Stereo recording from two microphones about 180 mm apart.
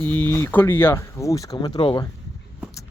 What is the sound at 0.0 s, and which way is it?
Speech, 10° left (ahead or behind).